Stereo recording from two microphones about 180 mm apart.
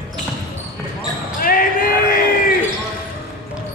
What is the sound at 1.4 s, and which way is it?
Basketball bounce, 50° left (ahead or behind).